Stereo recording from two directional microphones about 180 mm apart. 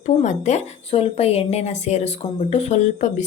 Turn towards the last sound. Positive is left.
turn(degrees=40)  # may be behind; listen again after turning